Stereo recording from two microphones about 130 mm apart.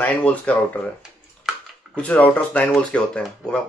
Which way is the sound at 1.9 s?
10° left (ahead or behind).